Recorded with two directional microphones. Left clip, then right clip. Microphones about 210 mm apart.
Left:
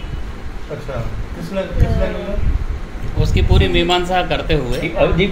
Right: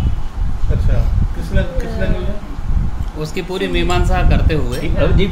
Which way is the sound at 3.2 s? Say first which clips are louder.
Left 2 dB; 25° right (ahead or behind).